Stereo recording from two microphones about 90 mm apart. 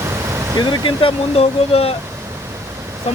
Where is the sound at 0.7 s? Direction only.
70° left (ahead or behind); by 1.9 s 90° left.